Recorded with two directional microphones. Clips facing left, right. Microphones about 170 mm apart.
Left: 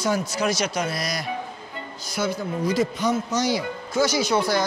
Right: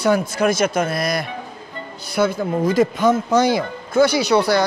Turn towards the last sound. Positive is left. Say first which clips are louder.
# right 5 dB
turn(degrees=-70)  # may be behind; listen again after turning